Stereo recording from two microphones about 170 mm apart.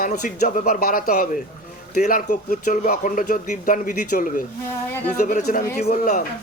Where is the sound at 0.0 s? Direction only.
50° left (ahead or behind).